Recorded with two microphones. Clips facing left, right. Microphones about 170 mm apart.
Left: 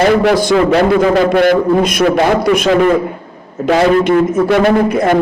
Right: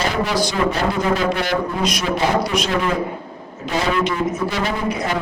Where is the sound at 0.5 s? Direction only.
70° left (ahead or behind).